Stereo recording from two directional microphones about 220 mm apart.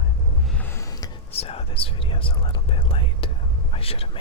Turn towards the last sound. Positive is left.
turn(degrees=25)  # may be behind; listen again after turning